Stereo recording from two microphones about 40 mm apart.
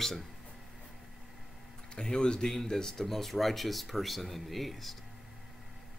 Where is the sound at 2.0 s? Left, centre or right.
Centre.